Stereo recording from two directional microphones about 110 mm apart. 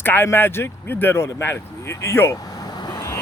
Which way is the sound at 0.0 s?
20° left (ahead or behind).